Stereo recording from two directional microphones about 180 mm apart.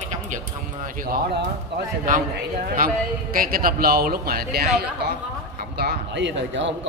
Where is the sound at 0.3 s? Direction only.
45° right (ahead or behind).